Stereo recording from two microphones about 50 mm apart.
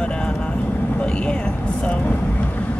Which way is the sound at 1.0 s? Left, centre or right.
Left.